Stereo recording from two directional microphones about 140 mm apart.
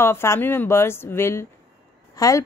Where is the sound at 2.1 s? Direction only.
25° left (ahead or behind).